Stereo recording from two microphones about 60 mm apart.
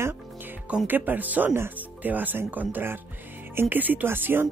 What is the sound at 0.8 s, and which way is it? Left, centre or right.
Speech, right.